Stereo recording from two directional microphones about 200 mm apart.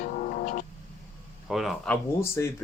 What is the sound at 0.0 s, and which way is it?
Music, 45° left (ahead or behind).